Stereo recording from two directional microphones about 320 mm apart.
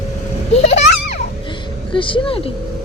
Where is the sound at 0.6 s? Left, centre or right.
Left.